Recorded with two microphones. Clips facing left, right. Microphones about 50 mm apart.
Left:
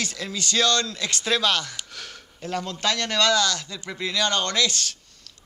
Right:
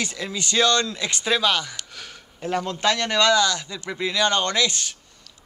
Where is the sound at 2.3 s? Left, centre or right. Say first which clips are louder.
Right 4 dB; right.